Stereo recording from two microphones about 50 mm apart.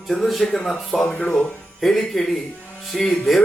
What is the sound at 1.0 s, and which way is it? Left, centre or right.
A man's voice, centre.